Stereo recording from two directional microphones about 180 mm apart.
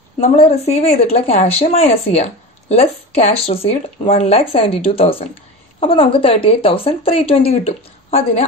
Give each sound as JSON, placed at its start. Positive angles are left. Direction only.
{"t": 0.2, "sound": "speech", "side_deg": 35}